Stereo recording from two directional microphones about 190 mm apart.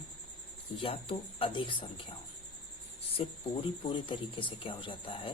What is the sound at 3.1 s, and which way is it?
Speech, 25° left (ahead or behind).